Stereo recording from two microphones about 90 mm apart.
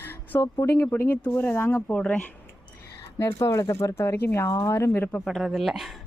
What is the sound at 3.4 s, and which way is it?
Speech, 35° left (ahead or behind).